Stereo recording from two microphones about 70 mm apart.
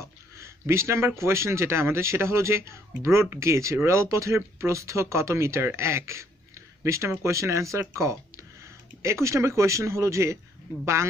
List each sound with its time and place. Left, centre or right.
0.0 s a man's voice: right